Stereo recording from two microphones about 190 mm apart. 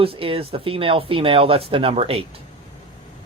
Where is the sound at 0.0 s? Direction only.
30° right (ahead or behind).